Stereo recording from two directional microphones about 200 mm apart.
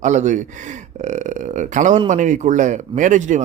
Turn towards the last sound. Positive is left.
turn(degrees=-40)  # may be behind; listen again after turning